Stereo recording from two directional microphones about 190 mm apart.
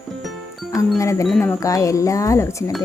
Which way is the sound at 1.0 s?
15° left (ahead or behind).